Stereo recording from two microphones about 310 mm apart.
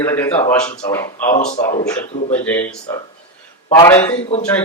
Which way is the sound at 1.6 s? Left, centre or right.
Centre.